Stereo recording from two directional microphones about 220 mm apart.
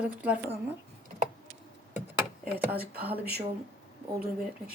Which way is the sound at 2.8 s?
45° right (ahead or behind).